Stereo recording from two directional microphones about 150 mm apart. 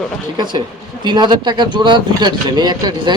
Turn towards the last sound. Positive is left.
turn(degrees=-30)  # may be behind; listen again after turning